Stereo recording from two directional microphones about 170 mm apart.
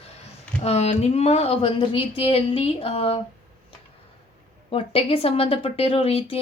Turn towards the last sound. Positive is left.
turn(degrees=35)  # may be behind; listen again after turning